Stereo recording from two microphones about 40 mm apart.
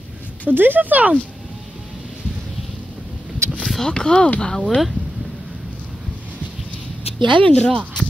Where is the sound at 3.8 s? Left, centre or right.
Centre.